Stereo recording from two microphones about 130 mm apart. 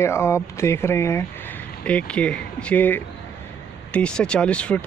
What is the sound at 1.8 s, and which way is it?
Speech, 10° left (ahead or behind).